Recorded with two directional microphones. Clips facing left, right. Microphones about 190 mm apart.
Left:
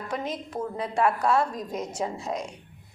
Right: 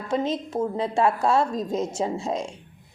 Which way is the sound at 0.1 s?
25° right (ahead or behind).